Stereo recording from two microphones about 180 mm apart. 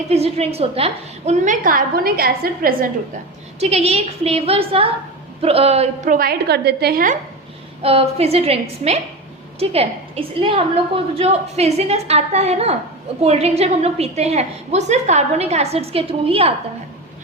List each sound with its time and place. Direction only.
0.1 s a woman's voice: 35° right (ahead or behind); by 2.7 s 55° right (ahead or behind)
3.6 s a woman's voice: 35° right (ahead or behind); by 7.2 s 50° right (ahead or behind)
7.8 s a woman's voice: 35° right (ahead or behind)